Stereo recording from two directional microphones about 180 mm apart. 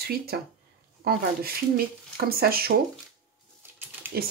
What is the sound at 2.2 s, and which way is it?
Speech, 55° right (ahead or behind).